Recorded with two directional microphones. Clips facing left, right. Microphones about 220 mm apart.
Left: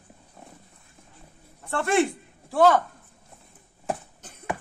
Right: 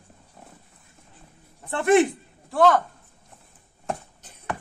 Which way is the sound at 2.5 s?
Centre (ahead or behind).